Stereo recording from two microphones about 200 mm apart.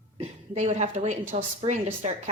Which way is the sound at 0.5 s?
35° right (ahead or behind).